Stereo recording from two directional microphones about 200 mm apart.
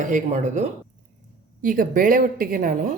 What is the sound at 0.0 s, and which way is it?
A woman's voice, 35° right (ahead or behind).